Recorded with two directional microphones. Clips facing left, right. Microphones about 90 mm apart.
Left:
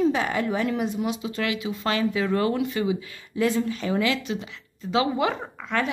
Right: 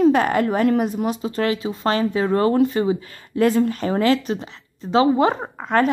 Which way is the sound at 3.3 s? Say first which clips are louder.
Right 6 dB; 50° right (ahead or behind).